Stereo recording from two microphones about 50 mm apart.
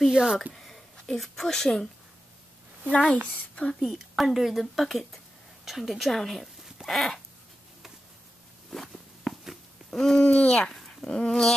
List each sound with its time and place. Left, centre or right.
0.1 s speech: centre
0.4 s a sound: centre
1.0 s speech: centre
2.9 s speech: left
3.8 s speech: centre
8.6 s walk: centre
9.8 s a sound: centre
10.2 s speech: left
11.1 s speech: centre